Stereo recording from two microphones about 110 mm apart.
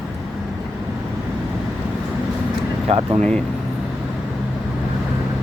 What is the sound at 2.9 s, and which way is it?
Speech, 65° right (ahead or behind).